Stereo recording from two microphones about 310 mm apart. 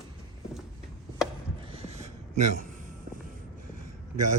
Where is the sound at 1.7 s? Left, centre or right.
Centre.